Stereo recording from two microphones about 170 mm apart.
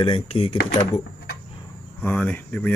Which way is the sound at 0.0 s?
35° left (ahead or behind).